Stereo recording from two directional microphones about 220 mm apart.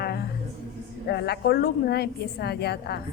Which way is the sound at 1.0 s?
45° left (ahead or behind).